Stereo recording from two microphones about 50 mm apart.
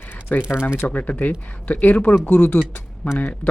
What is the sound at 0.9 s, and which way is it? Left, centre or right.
Speech, left.